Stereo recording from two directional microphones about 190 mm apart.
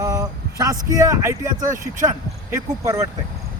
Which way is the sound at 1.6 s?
40° right (ahead or behind).